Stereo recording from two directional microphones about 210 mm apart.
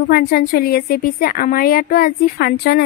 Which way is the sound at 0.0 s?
50° left (ahead or behind).